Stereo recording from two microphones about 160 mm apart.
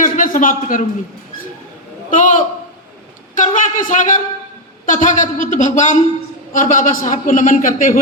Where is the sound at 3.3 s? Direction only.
55° left (ahead or behind).